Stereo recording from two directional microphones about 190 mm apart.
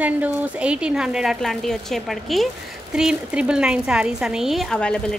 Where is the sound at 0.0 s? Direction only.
5° right (ahead or behind).